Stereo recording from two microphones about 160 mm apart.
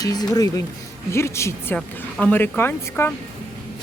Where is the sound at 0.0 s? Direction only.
25° left (ahead or behind).